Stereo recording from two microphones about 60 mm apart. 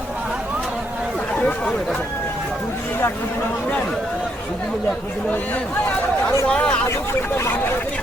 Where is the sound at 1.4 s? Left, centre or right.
Left.